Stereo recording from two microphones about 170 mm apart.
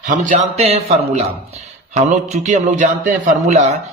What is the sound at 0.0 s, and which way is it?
A man's voice, 50° right (ahead or behind).